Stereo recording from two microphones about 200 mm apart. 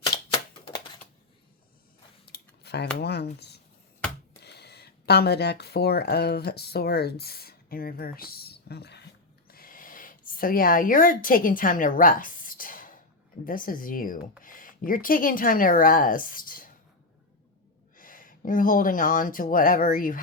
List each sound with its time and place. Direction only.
0.6 s typewriter: 20° left (ahead or behind)
2.2 s a sound: 55° left (ahead or behind)
3.0 s speech: 55° left (ahead or behind)
9.5 s a sound: 45° left (ahead or behind)
13.4 s speech: 45° left (ahead or behind)
17.9 s speech: 45° left (ahead or behind)